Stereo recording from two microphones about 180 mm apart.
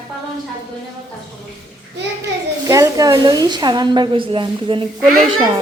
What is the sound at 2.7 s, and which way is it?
A woman's voice, 20° right (ahead or behind).